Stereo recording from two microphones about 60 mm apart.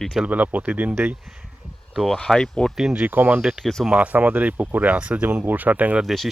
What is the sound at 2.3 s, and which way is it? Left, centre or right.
Speech, centre.